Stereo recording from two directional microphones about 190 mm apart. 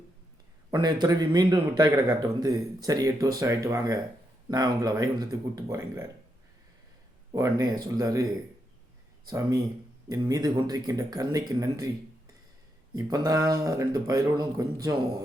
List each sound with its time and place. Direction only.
0.7 s a man's voice: 20° right (ahead or behind)
7.3 s speech: 20° right (ahead or behind)
10.1 s a man's voice: 20° right (ahead or behind)
13.0 s a man's voice: 20° right (ahead or behind)